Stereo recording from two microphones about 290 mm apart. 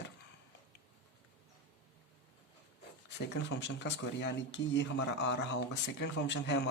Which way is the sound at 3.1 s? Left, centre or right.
Left.